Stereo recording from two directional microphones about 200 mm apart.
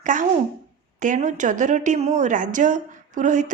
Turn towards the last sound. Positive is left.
turn(degrees=-40)  # may be behind; listen again after turning